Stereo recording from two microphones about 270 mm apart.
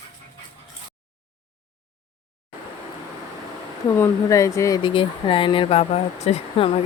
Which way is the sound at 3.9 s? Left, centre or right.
Centre.